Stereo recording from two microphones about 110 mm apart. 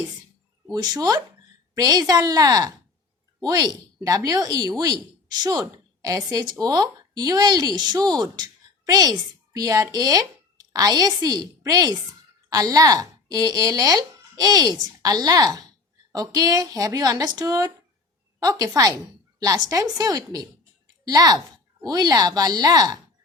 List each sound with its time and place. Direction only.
0.7 s a woman's voice: 35° right (ahead or behind)